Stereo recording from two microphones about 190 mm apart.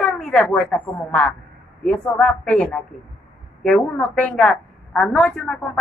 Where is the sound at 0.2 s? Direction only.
5° left (ahead or behind).